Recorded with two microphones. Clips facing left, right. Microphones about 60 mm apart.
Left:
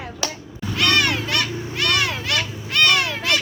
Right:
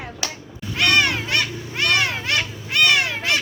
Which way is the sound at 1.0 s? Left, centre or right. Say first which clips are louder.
Right 1 dB; right.